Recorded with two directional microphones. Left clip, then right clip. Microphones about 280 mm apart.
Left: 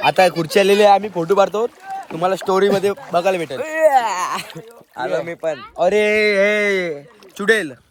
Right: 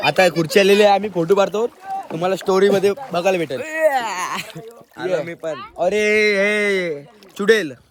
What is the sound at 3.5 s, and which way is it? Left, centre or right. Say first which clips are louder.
Speech: left 3 dB; centre.